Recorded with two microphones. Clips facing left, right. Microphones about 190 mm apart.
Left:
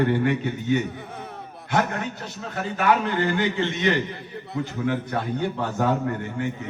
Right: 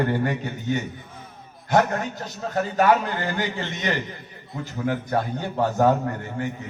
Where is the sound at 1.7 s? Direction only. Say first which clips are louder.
Right 4 dB; 40° right (ahead or behind).